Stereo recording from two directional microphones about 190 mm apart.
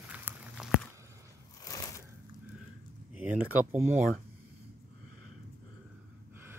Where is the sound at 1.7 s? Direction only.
20° left (ahead or behind).